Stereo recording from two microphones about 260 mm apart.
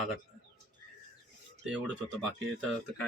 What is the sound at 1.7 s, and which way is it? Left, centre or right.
Speech, centre.